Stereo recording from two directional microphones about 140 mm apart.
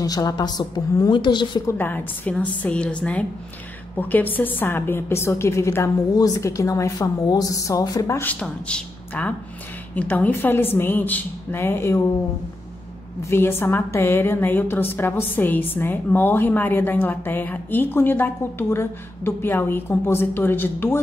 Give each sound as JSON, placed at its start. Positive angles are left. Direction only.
{"t": 0.0, "sound": "a woman's voice", "side_deg": 25}
{"t": 1.7, "sound": "a woman's voice", "side_deg": 15}
{"t": 13.2, "sound": "a woman's voice", "side_deg": 15}